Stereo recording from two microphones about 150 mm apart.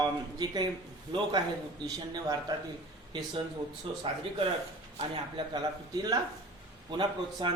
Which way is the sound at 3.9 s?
35° right (ahead or behind).